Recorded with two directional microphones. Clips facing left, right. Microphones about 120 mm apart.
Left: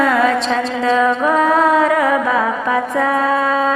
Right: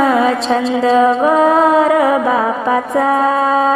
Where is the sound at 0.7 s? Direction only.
35° right (ahead or behind).